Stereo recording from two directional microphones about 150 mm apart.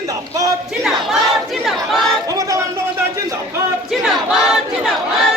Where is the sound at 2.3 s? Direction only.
20° right (ahead or behind).